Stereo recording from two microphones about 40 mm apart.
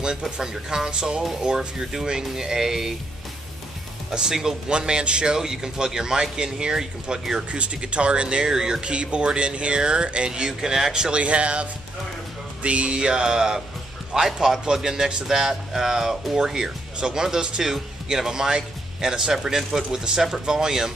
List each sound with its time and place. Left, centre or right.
0.2 s speech: centre
4.1 s speech: centre
4.7 s speech: right
7.5 s speech: right; by 8.8 s centre
8.8 s speech: right
12.6 s speech: right; by 20.9 s centre